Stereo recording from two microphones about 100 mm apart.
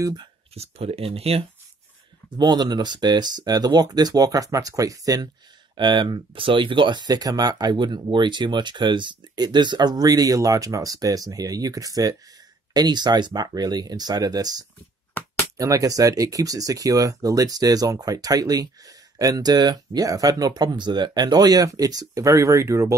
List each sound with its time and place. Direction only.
0.6 s speech: 85° right
2.3 s speech: 45° right (ahead or behind)
5.8 s speech: 50° right (ahead or behind); by 22.9 s 30° right (ahead or behind)